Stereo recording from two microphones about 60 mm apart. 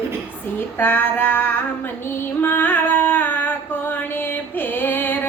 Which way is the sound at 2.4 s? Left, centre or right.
Left.